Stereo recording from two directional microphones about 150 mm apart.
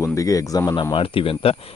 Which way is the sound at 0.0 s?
20° left (ahead or behind).